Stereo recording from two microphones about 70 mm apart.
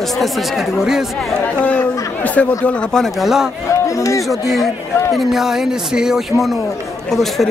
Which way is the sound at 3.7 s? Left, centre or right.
Left.